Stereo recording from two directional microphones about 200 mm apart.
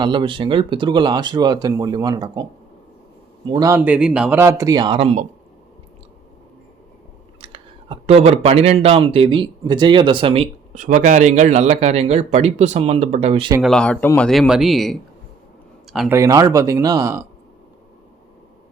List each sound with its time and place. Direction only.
0.0 s speech: 25° right (ahead or behind)
3.5 s speech: 15° right (ahead or behind)
7.4 s speech: 30° right (ahead or behind)
13.6 s speech: 5° left (ahead or behind)
16.1 s speech: 15° right (ahead or behind)